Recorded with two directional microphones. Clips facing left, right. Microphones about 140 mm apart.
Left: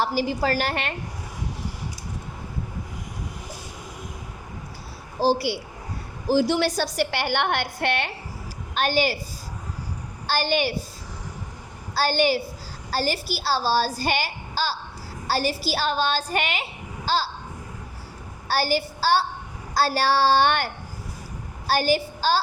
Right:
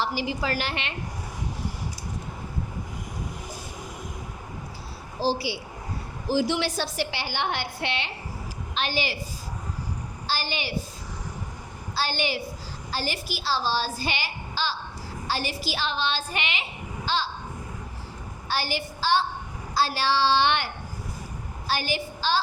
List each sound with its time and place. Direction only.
0.0 s a woman's voice: 45° left (ahead or behind)
5.2 s a child's voice: 55° left (ahead or behind)
6.3 s a woman's voice: 40° left (ahead or behind)
10.2 s a woman's voice: 50° left (ahead or behind)
11.9 s a woman's voice: 45° left (ahead or behind)
18.4 s a woman's voice: 40° left (ahead or behind)
21.7 s a woman's voice: 40° left (ahead or behind)